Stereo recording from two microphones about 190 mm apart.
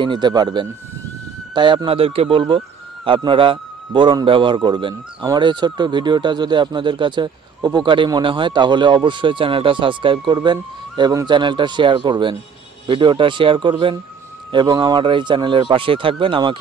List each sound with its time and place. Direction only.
0.0 s a man's voice: 25° right (ahead or behind)